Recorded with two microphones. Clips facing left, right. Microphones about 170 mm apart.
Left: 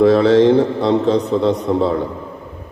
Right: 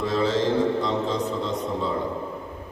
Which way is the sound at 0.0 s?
70° left (ahead or behind).